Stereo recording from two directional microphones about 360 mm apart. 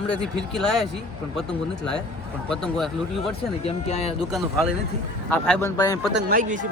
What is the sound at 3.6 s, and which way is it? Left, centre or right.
Speech, centre.